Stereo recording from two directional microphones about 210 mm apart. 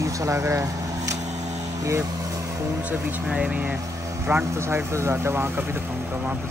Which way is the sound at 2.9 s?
5° right (ahead or behind).